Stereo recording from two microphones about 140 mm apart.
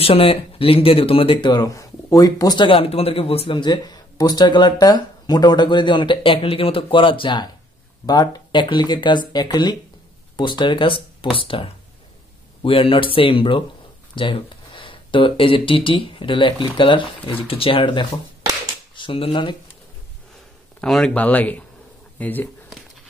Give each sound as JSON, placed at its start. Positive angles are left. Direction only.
{"t": 0.0, "sound": "speech", "side_deg": 45}
{"t": 20.8, "sound": "speech", "side_deg": 5}